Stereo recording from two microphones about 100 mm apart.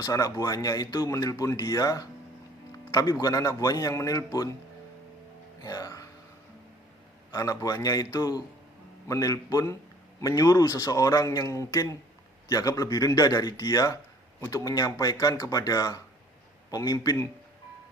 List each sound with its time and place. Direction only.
0.0 s speech: 35° left (ahead or behind)
5.6 s music: 35° left (ahead or behind)
7.3 s speech: 35° left (ahead or behind)